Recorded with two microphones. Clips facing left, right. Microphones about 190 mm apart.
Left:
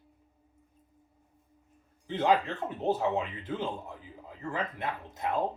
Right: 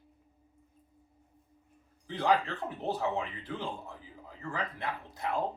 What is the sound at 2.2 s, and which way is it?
Speech, 20° left (ahead or behind).